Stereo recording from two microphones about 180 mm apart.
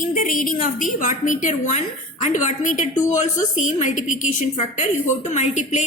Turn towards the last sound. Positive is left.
turn(degrees=40)  # may be behind; listen again after turning